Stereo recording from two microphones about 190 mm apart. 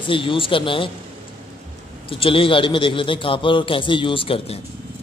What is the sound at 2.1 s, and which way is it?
A man's voice, 30° left (ahead or behind).